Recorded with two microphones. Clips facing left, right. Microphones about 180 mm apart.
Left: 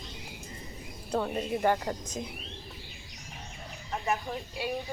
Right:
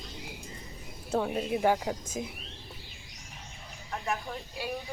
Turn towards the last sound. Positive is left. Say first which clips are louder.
# left 2 dB
turn(degrees=0)  # may be behind; listen again after turning